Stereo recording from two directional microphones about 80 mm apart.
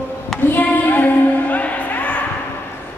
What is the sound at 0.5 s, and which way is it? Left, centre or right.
Music, left.